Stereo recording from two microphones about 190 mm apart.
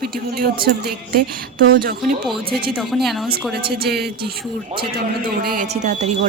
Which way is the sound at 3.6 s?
55° right (ahead or behind).